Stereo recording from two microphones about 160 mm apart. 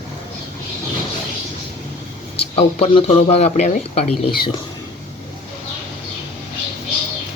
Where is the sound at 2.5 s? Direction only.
40° left (ahead or behind).